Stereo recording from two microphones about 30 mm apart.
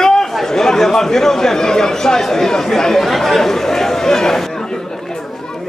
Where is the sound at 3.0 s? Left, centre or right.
Centre.